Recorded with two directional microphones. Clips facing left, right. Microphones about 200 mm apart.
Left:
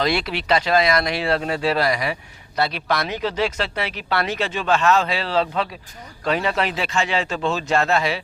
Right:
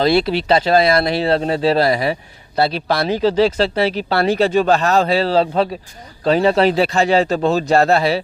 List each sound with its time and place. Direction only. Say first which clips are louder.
0.0 s speech: right 7 dB; 30° right (ahead or behind)